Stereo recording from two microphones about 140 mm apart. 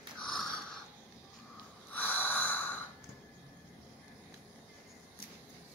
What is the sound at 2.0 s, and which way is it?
Snort, 10° left (ahead or behind).